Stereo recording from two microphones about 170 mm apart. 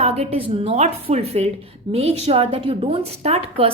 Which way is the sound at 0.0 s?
35° right (ahead or behind).